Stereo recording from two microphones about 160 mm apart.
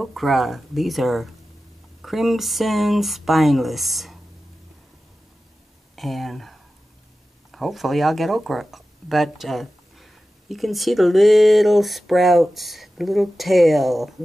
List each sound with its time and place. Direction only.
0.0 s speech: centre (ahead or behind)
5.9 s speech: centre (ahead or behind)